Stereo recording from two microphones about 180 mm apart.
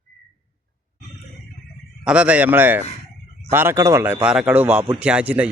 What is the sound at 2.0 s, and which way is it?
Speech, 5° right (ahead or behind).